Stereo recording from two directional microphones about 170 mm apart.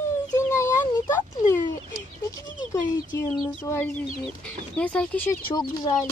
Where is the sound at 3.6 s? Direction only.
15° left (ahead or behind).